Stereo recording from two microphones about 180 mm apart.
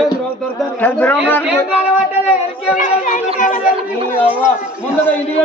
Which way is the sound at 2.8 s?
45° left (ahead or behind).